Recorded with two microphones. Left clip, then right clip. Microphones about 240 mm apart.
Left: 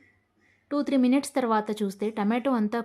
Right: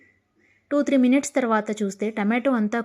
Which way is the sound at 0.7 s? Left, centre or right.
Centre.